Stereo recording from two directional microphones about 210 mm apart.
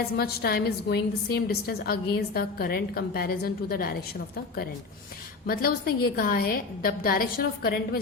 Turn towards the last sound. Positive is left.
turn(degrees=45)  # may be behind; listen again after turning